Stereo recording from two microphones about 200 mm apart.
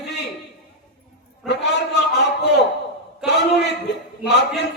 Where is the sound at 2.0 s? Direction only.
55° left (ahead or behind).